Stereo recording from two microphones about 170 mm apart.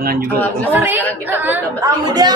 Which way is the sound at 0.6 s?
10° right (ahead or behind).